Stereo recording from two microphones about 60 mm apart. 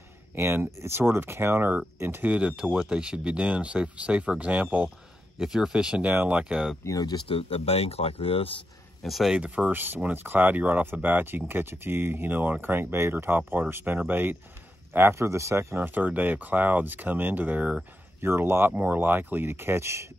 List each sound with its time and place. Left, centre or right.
0.4 s speech: right
2.3 s speech: centre
5.4 s speech: centre
6.0 s speech: right
6.8 s speech: left
9.0 s speech: centre
9.3 s speech: centre
9.7 s speech: right
15.7 s speech: right
18.2 s speech: right
18.7 s speech: right